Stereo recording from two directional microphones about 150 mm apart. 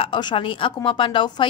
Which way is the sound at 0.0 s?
30° left (ahead or behind).